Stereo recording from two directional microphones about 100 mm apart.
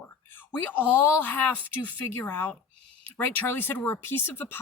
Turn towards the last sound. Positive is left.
turn(degrees=20)  # may be behind; listen again after turning